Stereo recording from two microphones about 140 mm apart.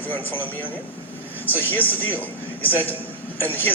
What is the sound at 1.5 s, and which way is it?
Speech, 15° left (ahead or behind).